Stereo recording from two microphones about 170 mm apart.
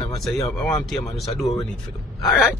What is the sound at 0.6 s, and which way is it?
Speech, centre (ahead or behind).